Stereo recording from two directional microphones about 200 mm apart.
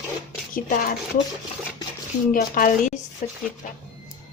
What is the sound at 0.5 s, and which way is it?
Speech, 45° left (ahead or behind).